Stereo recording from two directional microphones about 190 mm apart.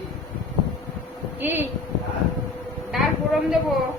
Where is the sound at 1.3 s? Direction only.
10° right (ahead or behind).